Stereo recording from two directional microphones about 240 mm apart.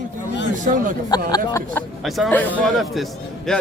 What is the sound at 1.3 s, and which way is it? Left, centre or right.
Speech, centre.